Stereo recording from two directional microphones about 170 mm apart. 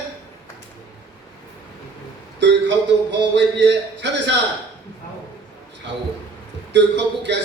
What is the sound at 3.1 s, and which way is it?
Speech, 90° right.